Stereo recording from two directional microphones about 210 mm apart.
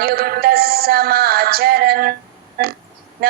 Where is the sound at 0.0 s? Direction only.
45° right (ahead or behind).